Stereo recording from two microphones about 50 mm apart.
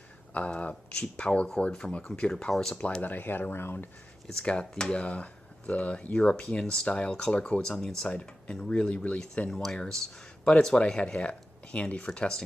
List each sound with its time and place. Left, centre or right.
0.3 s speech: left
2.5 s speech: centre
3.0 s speech: left
4.4 s speech: centre
9.5 s speech: centre